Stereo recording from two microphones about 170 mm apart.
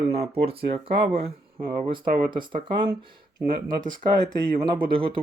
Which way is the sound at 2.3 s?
30° right (ahead or behind).